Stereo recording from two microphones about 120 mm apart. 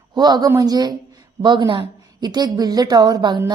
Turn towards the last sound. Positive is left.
turn(degrees=-35)  # may be behind; listen again after turning